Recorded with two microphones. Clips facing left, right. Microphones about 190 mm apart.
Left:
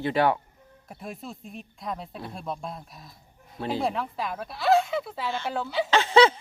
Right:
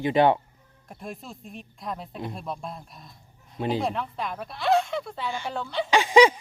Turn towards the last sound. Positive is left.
turn(degrees=-15)  # may be behind; listen again after turning